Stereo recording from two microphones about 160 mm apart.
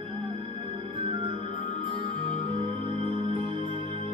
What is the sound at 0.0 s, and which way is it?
Music, 35° right (ahead or behind).